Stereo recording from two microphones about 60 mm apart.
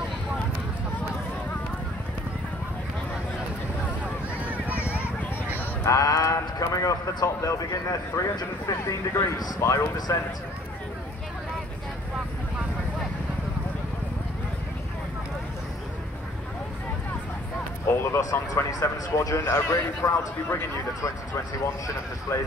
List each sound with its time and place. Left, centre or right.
4.0 s boat: right
5.9 s speech: left
9.6 s speech: left
9.9 s speech: left
17.8 s vehicle: left
18.3 s a man's voice: left